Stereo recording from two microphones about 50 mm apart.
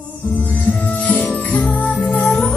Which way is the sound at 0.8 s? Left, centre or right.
Left.